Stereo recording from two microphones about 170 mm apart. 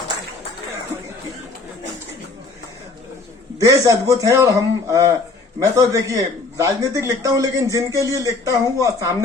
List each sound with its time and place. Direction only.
3.7 s speech: 20° right (ahead or behind)